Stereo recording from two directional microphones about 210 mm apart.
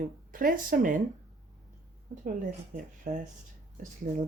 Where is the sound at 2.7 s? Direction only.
40° right (ahead or behind).